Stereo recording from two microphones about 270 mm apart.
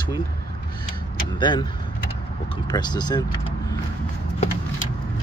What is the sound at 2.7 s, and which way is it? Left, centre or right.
Speech, centre.